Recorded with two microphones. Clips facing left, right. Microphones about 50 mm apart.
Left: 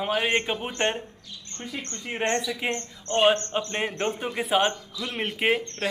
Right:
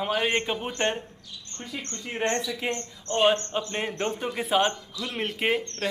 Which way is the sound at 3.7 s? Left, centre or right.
Centre.